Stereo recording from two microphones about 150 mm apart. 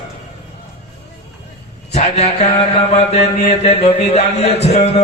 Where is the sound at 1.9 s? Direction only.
50° left (ahead or behind).